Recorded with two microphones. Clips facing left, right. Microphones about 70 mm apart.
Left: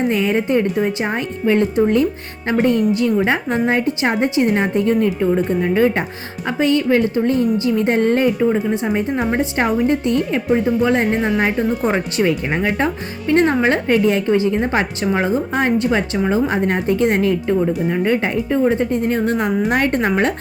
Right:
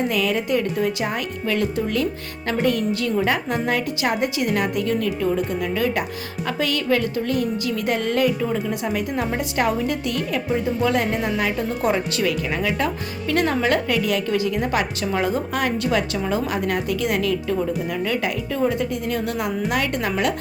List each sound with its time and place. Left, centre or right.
0.1 s a woman's voice: left